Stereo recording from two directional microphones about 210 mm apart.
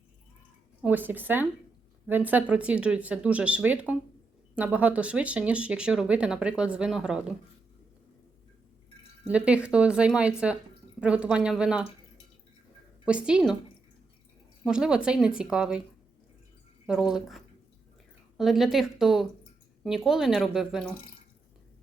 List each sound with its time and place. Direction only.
0.8 s speech: 10° right (ahead or behind)
9.2 s speech: 5° right (ahead or behind)
13.1 s speech: 5° right (ahead or behind)
14.6 s speech: 5° right (ahead or behind)
16.8 s speech: 5° right (ahead or behind)